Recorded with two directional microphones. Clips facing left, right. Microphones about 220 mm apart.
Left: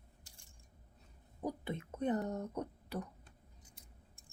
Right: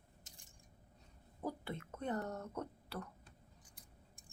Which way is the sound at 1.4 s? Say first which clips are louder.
Left 3 dB; 20° left (ahead or behind).